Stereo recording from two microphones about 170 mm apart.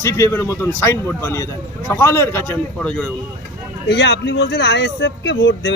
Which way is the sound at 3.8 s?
90° left.